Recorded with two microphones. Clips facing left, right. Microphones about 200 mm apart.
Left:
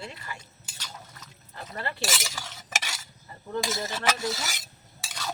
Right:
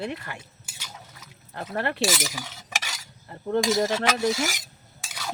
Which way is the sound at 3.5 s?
65° right (ahead or behind).